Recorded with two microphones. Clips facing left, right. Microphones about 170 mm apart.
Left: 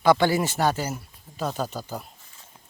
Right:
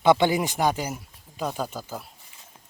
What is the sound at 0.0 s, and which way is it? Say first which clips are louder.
Speech: even; 20° right (ahead or behind).